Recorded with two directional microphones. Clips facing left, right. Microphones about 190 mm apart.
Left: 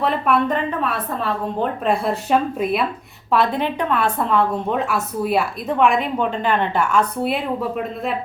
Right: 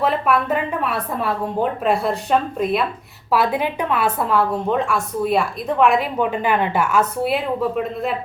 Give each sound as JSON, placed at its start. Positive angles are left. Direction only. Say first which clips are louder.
{"t": 0.0, "sound": "a woman's voice", "louder": "even", "side_deg": -5}
{"t": 3.3, "sound": "a woman's voice", "louder": "even", "side_deg": -10}